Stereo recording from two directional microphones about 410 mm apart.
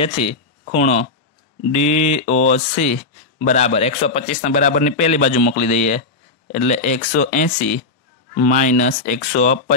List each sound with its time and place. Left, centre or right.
0.0 s a man's voice: centre